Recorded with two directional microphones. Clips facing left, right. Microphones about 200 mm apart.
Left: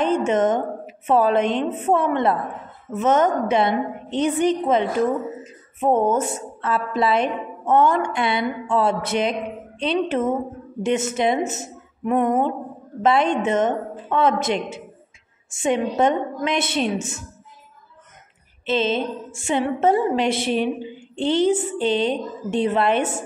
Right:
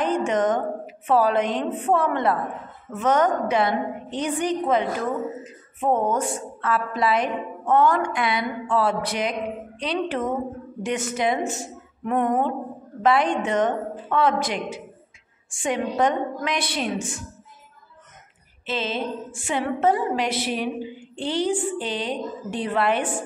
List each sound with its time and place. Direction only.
0.0 s a woman's voice: 25° left (ahead or behind)
18.7 s a woman's voice: 25° left (ahead or behind)